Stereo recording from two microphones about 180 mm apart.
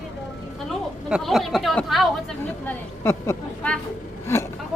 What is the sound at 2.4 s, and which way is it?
A woman's voice, 15° left (ahead or behind).